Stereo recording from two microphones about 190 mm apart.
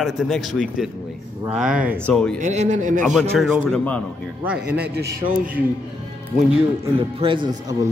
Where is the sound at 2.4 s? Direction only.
40° right (ahead or behind).